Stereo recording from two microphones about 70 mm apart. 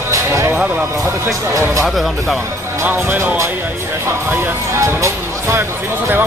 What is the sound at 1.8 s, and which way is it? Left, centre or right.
Speech, centre.